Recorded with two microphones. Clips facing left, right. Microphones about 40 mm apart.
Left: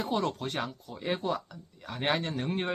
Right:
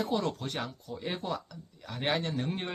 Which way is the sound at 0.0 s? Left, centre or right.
Centre.